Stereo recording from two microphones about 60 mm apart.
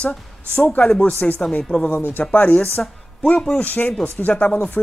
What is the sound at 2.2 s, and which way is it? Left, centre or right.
Speech, left.